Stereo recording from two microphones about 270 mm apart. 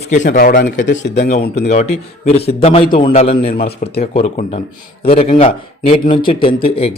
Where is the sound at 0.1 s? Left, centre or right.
Left.